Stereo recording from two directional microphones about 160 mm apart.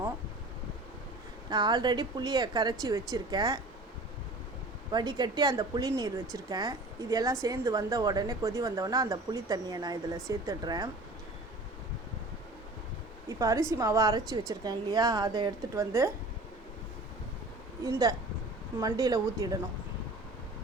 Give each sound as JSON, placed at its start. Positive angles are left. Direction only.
{"t": 1.5, "sound": "a woman's voice", "side_deg": -25}
{"t": 4.9, "sound": "a woman's voice", "side_deg": -25}
{"t": 13.2, "sound": "a woman's voice", "side_deg": -20}
{"t": 18.8, "sound": "a woman's voice", "side_deg": -20}